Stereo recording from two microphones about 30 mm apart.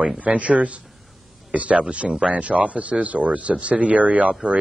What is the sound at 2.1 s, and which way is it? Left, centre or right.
Speech, right.